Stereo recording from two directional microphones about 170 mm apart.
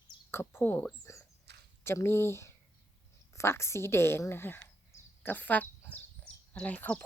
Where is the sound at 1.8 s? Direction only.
15° left (ahead or behind).